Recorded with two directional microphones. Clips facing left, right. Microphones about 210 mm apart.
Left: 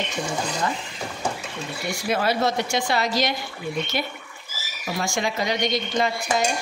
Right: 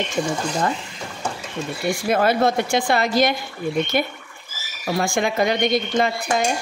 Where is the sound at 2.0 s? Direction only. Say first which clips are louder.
Right 4 dB; 50° right (ahead or behind).